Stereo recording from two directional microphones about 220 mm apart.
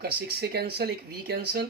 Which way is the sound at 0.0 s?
45° right (ahead or behind).